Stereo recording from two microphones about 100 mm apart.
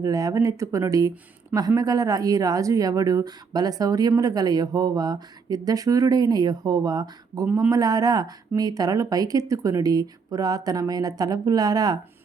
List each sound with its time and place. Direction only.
0.0 s speech: 35° right (ahead or behind)